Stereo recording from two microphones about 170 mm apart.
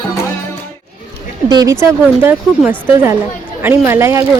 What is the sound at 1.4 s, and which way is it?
A woman's voice, 20° right (ahead or behind).